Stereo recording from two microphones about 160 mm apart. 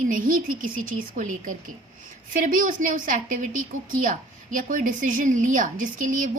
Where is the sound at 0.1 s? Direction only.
60° right (ahead or behind).